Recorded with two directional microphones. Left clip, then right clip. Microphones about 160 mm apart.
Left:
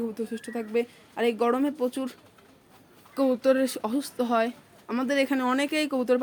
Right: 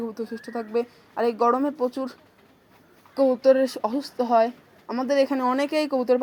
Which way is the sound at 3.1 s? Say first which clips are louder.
Right 5 dB; 15° left (ahead or behind).